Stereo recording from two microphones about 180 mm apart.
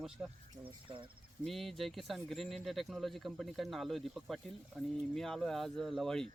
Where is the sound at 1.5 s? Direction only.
Centre (ahead or behind).